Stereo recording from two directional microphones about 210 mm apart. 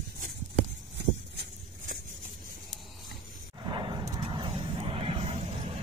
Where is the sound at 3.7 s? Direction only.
20° right (ahead or behind).